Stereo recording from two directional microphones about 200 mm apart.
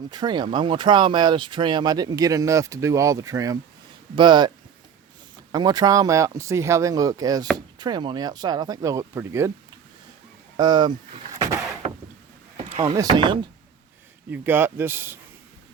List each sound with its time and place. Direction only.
0.1 s speech: 20° right (ahead or behind)
10.6 s speech: 20° right (ahead or behind)
12.5 s a sound: 30° right (ahead or behind)
12.9 s speech: 20° right (ahead or behind)
14.3 s speech: 10° right (ahead or behind)